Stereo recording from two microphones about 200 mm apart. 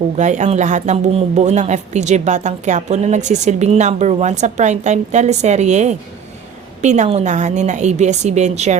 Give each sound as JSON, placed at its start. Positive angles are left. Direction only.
{"t": 0.2, "sound": "speech", "side_deg": -35}